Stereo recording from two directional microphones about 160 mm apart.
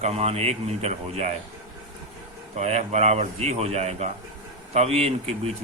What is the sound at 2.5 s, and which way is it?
Speech, 45° right (ahead or behind).